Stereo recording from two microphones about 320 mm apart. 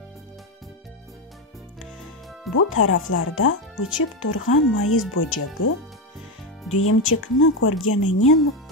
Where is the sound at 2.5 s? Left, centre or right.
Left.